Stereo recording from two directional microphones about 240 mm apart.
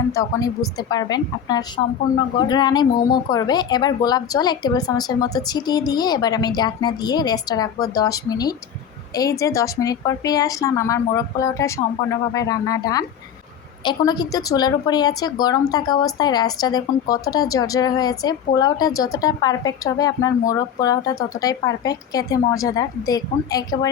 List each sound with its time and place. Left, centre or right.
0.1 s a woman's voice: centre